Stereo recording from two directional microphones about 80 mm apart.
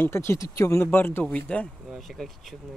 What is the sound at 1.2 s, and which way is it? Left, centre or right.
Speech, centre.